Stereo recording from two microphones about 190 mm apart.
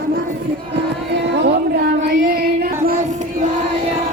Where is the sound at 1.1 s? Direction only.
65° right (ahead or behind).